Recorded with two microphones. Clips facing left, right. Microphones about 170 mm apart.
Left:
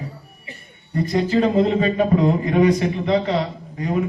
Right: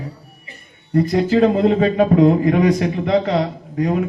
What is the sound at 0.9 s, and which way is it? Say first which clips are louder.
A man's voice: right 4 dB; 55° right (ahead or behind).